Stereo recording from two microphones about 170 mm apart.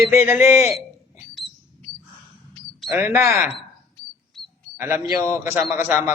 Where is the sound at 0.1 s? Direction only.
15° right (ahead or behind).